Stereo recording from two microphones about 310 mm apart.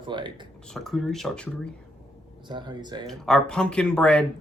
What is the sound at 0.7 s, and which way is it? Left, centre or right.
Speech, centre.